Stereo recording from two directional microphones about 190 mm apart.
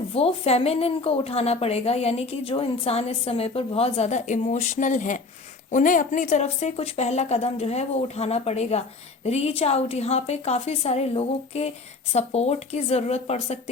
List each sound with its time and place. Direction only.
0.1 s a woman's voice: 30° left (ahead or behind)